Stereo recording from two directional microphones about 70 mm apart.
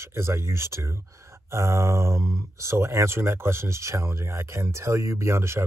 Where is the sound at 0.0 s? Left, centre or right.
Right.